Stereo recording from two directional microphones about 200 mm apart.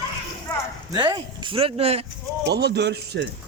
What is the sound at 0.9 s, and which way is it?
Speech, 20° right (ahead or behind).